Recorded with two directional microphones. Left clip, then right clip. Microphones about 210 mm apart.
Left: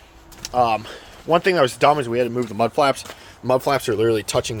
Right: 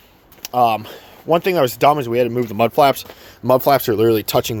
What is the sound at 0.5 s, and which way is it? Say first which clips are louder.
Speech: right 3 dB; 25° right (ahead or behind).